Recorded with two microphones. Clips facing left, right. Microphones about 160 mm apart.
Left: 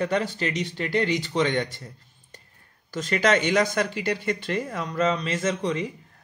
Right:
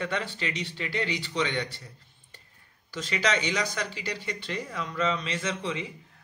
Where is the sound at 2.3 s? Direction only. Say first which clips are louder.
Left 6 dB; 45° left (ahead or behind).